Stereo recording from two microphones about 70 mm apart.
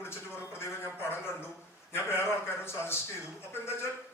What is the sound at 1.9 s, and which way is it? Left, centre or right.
A man's voice, left.